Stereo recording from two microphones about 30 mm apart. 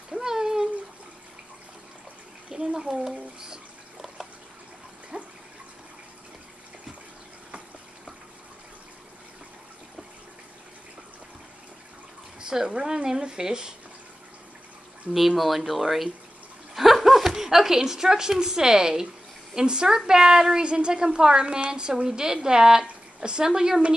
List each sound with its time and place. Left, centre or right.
0.1 s a sound: centre
2.5 s speech: right
3.0 s a sound: centre
5.1 s water: right
12.4 s a woman's voice: right
15.1 s a woman's voice: centre; by 23.8 s right